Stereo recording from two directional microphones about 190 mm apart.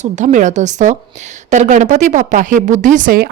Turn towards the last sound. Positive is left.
turn(degrees=-45)  # may be behind; listen again after turning